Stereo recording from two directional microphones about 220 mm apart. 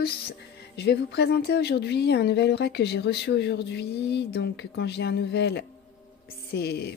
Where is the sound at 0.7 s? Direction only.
45° left (ahead or behind).